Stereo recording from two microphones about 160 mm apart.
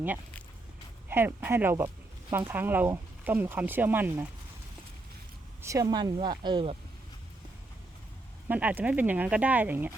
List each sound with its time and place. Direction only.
1.0 s speech: 15° right (ahead or behind)
5.6 s speech: 20° right (ahead or behind)
8.4 s speech: 10° right (ahead or behind)